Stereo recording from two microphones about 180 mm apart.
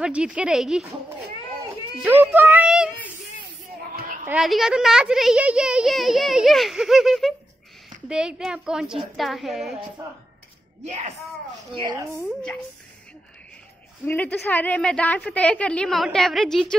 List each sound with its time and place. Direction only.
0.0 s a child's voice: 5° right (ahead or behind)
2.0 s speech: 10° right (ahead or behind)
3.9 s a sound: 50° right (ahead or behind)
4.3 s a child's voice: centre (ahead or behind)
11.7 s speech: 25° right (ahead or behind)
14.0 s a woman's voice: 10° left (ahead or behind)